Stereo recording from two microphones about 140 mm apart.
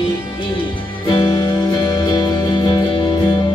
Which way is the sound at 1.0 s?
35° left (ahead or behind).